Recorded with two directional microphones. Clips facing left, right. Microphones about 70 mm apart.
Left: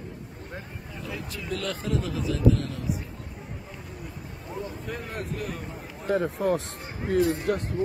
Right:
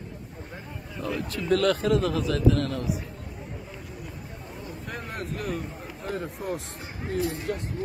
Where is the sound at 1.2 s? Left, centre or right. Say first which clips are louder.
Right 10 dB; right.